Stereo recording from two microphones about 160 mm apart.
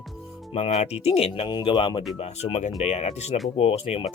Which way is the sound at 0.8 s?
40° left (ahead or behind).